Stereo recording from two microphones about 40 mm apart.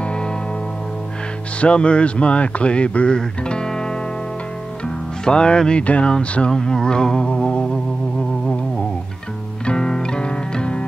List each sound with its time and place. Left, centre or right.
0.0 s music: left
1.6 s speech: left
3.2 s music: centre
4.8 s speech: left
6.5 s speech: centre
9.7 s music: centre